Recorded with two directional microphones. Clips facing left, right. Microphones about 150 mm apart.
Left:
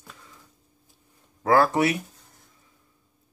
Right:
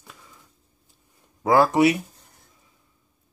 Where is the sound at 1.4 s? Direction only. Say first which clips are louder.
Right 3 dB; 15° right (ahead or behind).